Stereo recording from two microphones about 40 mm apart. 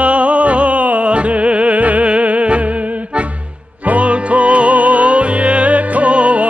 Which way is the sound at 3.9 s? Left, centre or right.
Right.